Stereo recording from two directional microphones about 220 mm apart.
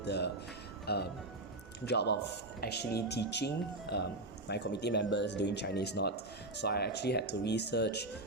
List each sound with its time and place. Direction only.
0.0 s speech: 50° left (ahead or behind)